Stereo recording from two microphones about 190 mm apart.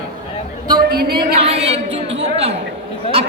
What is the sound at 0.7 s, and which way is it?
Speech, 55° right (ahead or behind).